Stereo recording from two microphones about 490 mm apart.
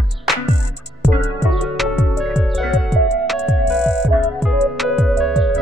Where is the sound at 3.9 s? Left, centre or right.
Left.